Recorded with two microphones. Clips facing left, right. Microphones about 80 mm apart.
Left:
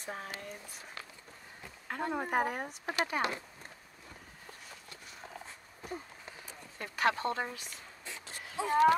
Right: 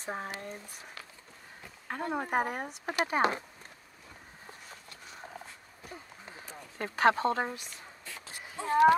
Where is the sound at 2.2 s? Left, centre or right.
Centre.